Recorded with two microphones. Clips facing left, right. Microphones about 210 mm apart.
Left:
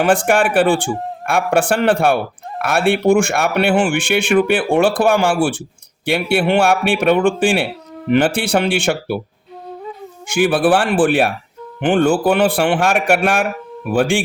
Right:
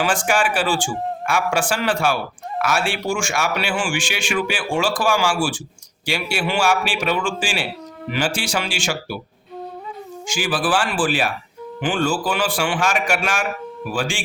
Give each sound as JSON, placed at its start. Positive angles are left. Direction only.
{"t": 0.0, "sound": "a man's voice", "side_deg": 60}
{"t": 10.2, "sound": "a man's voice", "side_deg": 60}